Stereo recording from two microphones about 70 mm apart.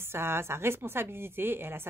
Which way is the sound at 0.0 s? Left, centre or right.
Right.